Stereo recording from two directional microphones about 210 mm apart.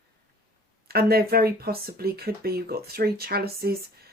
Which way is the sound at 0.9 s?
45° right (ahead or behind).